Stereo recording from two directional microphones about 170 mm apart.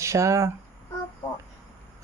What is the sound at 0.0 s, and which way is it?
Speech, 15° right (ahead or behind).